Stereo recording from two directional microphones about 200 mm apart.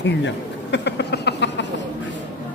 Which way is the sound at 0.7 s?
60° left (ahead or behind).